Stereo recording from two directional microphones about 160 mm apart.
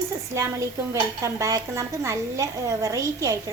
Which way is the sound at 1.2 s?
20° right (ahead or behind).